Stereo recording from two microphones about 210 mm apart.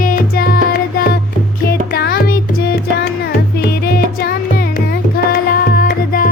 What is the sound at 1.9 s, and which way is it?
Music, 45° left (ahead or behind).